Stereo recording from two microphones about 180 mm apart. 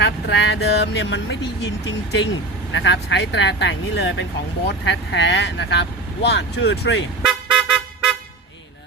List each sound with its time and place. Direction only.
0.0 s speech: 75° left (ahead or behind)
7.3 s vehicle: 5° right (ahead or behind)